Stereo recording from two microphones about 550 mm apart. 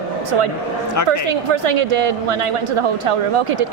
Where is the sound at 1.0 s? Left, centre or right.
Right.